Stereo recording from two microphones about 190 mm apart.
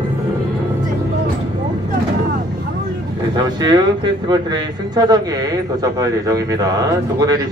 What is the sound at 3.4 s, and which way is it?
A man's voice, 20° right (ahead or behind).